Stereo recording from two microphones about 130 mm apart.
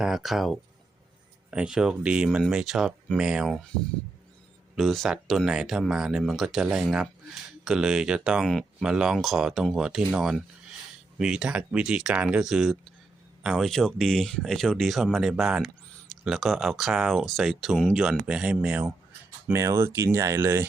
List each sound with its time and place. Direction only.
0.0 s speech: centre (ahead or behind)
4.7 s speech: centre (ahead or behind)
19.5 s speech: 20° right (ahead or behind)